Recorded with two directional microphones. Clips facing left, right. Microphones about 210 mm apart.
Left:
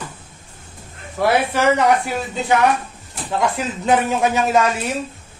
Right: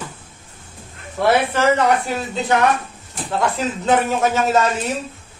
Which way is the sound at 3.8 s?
15° left (ahead or behind).